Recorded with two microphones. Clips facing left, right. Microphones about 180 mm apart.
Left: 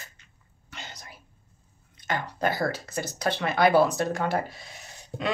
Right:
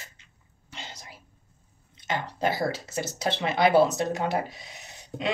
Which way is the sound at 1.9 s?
25° right (ahead or behind).